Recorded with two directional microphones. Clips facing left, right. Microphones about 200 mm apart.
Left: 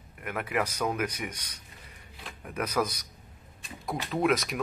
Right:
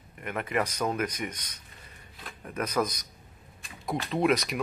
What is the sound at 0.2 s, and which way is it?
Speech, 5° left (ahead or behind).